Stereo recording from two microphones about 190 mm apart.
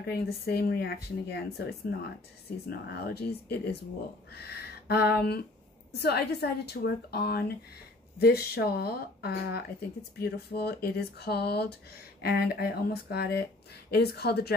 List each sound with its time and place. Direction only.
0.0 s speech: 55° left (ahead or behind)
4.3 s a sound: 55° left (ahead or behind)
5.9 s speech: 60° left (ahead or behind)